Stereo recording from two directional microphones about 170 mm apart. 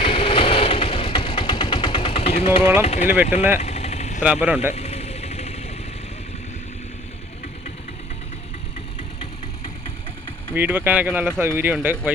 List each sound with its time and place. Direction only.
0.0 s vehicle: 30° left (ahead or behind)
2.8 s speech: 40° left (ahead or behind)
3.6 s vehicle: 40° left (ahead or behind)
4.2 s speech: 10° right (ahead or behind)
4.7 s vehicle: 40° left (ahead or behind)
10.5 s speech: 10° right (ahead or behind)